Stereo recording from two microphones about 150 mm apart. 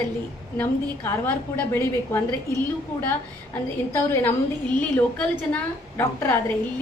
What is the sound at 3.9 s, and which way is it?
Speech, 15° left (ahead or behind).